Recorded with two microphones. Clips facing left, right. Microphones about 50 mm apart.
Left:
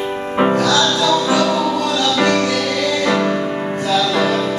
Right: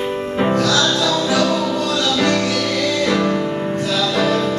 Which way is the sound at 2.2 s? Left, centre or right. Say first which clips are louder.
Left 2 dB; centre.